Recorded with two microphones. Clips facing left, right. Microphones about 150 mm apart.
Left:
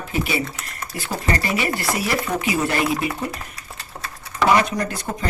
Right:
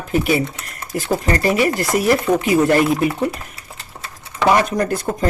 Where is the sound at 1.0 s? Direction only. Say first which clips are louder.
Right 6 dB; 45° right (ahead or behind).